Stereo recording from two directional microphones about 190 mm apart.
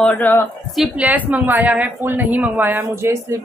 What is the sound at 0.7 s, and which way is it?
Speech, 5° right (ahead or behind).